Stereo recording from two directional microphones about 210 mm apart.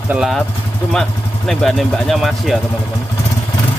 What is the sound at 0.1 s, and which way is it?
Speech, centre (ahead or behind).